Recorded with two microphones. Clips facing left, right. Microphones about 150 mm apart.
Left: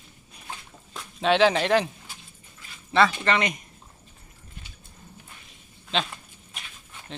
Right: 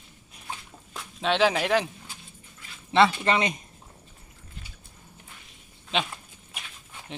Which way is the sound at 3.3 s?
25° right (ahead or behind).